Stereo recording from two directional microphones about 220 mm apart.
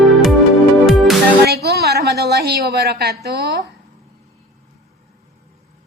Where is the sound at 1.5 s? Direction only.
45° right (ahead or behind).